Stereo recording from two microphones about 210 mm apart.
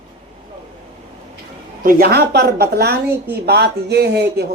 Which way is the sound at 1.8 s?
45° right (ahead or behind).